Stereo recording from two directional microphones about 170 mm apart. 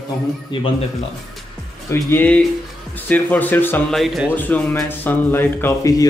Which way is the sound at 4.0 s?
Centre (ahead or behind).